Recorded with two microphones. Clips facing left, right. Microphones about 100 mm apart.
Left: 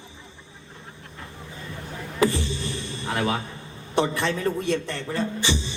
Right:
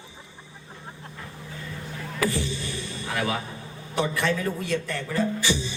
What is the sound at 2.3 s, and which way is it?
A man's voice, 20° left (ahead or behind).